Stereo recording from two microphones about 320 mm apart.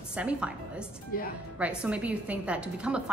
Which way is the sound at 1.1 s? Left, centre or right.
Left.